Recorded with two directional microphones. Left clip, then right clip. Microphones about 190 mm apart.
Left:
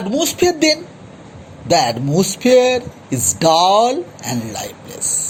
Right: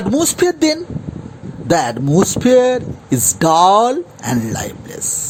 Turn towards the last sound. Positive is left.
turn(degrees=-35)  # may be behind; listen again after turning